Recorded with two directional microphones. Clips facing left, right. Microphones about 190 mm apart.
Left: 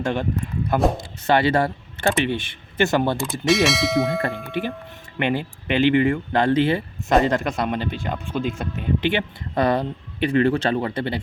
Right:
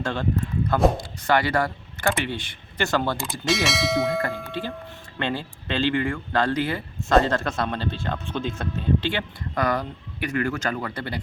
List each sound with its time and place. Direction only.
0.0 s speech: 20° left (ahead or behind)
3.4 s bell: centre (ahead or behind)
4.6 s speech: 20° left (ahead or behind)